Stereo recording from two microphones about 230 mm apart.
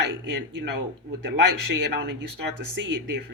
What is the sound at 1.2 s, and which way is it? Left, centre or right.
Speech, right.